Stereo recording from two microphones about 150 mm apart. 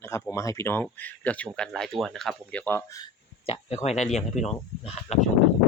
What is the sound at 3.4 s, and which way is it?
Speech, 45° left (ahead or behind).